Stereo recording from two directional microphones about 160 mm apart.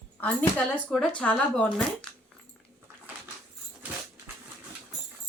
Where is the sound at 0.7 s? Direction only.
5° left (ahead or behind).